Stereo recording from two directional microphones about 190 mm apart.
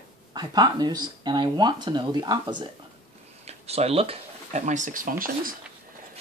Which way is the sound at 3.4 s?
35° right (ahead or behind).